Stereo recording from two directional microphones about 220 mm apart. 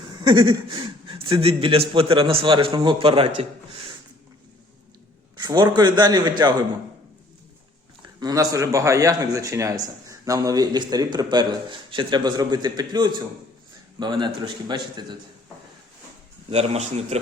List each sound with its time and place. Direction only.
0.2 s a man's voice: 20° right (ahead or behind)
5.4 s a man's voice: 20° right (ahead or behind)
8.2 s a man's voice: 15° right (ahead or behind)
16.5 s a man's voice: 30° right (ahead or behind)